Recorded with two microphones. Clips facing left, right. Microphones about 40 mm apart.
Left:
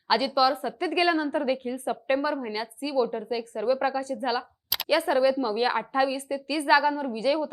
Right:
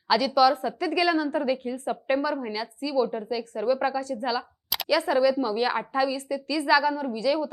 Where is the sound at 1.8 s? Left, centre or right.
Centre; by 7.5 s left.